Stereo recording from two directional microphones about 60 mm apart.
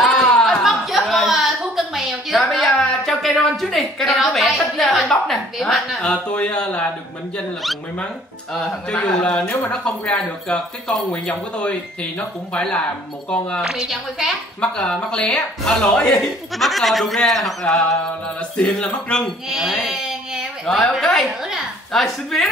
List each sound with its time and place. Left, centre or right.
0.0 s a sound: centre
3.1 s a woman's voice: centre
5.9 s speech: centre
8.5 s speech: centre
13.6 s a woman's voice: centre
14.8 s speech: centre
18.6 s speech: centre
19.5 s a sound: centre
20.7 s a woman's voice: centre